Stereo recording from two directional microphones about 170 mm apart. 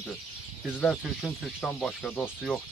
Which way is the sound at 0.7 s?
5° left (ahead or behind).